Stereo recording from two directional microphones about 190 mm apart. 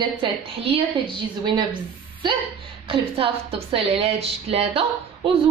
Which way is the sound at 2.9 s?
30° right (ahead or behind).